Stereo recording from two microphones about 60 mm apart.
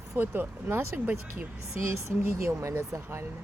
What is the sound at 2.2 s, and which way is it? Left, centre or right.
Speech, right.